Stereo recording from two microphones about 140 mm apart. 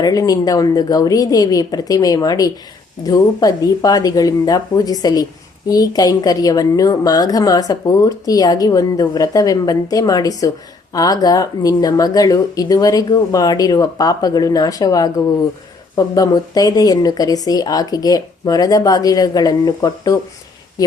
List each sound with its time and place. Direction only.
0.0 s a woman's voice: 25° left (ahead or behind)